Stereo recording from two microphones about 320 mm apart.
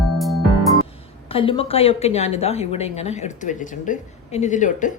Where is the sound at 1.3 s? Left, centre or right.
Centre.